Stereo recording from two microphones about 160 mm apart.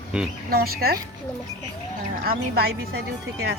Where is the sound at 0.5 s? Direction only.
70° right (ahead or behind).